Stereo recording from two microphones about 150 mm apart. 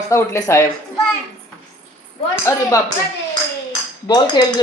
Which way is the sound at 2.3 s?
20° left (ahead or behind).